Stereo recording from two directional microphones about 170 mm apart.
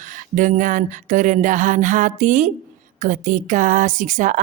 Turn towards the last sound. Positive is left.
turn(degrees=-50)  # may be behind; listen again after turning